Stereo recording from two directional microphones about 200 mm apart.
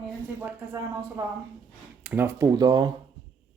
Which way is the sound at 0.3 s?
10° right (ahead or behind).